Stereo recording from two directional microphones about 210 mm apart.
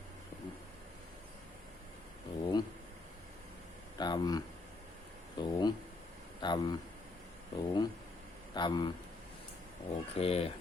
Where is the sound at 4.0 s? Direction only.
20° left (ahead or behind).